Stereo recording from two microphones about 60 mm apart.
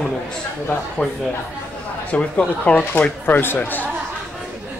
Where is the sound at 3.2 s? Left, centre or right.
Left.